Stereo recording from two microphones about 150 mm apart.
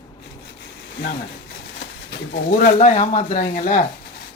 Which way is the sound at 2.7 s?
50° left (ahead or behind).